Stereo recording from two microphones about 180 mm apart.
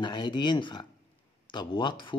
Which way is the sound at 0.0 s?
25° left (ahead or behind).